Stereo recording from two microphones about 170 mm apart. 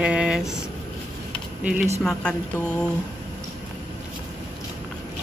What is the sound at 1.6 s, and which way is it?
Speech, 5° right (ahead or behind).